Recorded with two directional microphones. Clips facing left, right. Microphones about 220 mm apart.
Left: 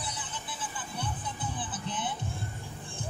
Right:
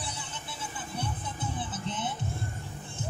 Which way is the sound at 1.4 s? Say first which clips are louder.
Right 3 dB; 25° right (ahead or behind).